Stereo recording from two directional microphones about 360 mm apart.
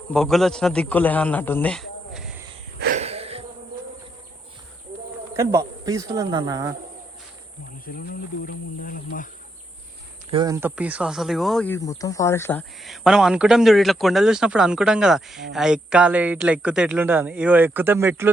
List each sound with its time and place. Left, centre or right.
0.1 s a man's voice: centre
2.7 s wheeze: right
5.4 s speech: centre
7.9 s speech: left
10.3 s speech: centre